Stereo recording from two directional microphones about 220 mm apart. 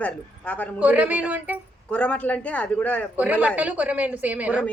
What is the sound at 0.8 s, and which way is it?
Speech, 5° right (ahead or behind).